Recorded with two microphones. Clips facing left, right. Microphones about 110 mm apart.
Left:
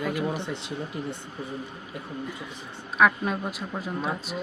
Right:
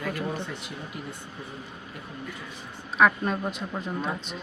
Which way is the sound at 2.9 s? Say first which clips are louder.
Even; centre (ahead or behind).